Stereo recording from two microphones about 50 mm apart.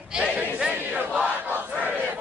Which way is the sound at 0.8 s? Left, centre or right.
Right.